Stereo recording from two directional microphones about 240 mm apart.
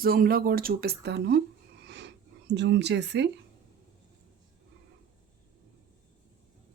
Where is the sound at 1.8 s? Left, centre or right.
Right.